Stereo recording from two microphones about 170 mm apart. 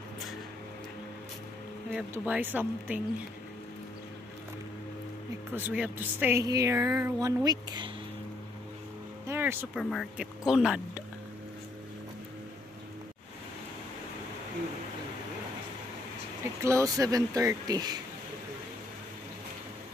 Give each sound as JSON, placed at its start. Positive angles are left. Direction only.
{"t": 1.9, "sound": "speech", "side_deg": -10}
{"t": 5.5, "sound": "speech", "side_deg": -10}
{"t": 9.3, "sound": "a sound", "side_deg": -10}
{"t": 9.8, "sound": "speech", "side_deg": 0}
{"t": 16.6, "sound": "speech", "side_deg": -20}